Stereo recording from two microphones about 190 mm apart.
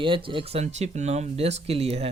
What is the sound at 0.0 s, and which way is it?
Speech, 25° right (ahead or behind).